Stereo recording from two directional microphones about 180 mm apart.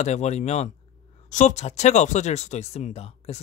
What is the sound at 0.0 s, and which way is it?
Speech, 40° left (ahead or behind).